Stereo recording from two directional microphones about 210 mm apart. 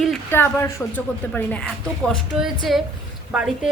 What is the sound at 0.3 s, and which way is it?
A woman's voice, 10° left (ahead or behind).